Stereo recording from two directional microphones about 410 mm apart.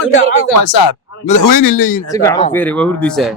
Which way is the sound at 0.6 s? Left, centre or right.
Left.